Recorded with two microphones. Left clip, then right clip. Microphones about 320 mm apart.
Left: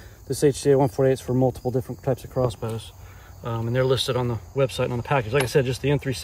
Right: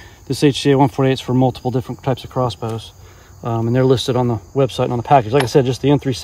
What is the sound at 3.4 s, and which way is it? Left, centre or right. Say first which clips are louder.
Speech: right 7 dB; right.